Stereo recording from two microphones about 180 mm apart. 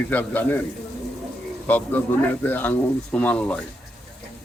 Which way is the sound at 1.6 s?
10° left (ahead or behind).